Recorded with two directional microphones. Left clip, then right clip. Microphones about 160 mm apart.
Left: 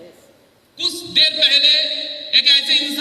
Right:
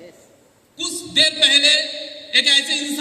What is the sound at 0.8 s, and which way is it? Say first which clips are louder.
A man's voice: left 2 dB; 30° right (ahead or behind).